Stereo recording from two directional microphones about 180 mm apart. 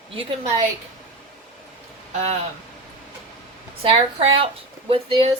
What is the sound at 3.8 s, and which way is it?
Speech, 30° right (ahead or behind).